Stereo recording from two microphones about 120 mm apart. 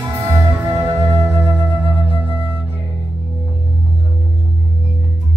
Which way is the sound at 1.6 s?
45° right (ahead or behind).